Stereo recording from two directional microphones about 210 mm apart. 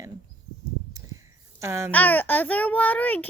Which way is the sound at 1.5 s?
15° right (ahead or behind).